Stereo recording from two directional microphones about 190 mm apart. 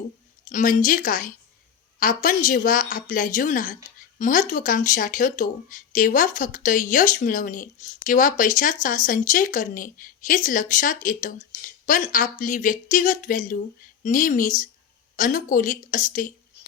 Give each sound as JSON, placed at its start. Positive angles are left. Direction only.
{"t": 0.5, "sound": "speech", "side_deg": 45}